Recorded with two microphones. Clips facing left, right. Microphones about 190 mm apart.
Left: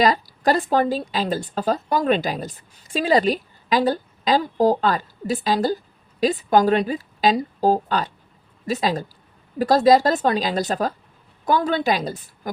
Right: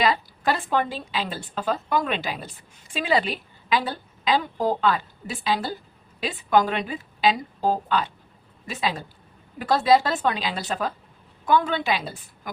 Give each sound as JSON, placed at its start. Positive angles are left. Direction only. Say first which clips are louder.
{"t": 0.0, "sound": "a woman's voice", "louder": "left 4 dB", "side_deg": 40}